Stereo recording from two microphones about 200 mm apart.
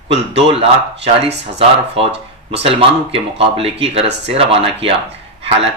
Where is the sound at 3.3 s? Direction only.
30° right (ahead or behind).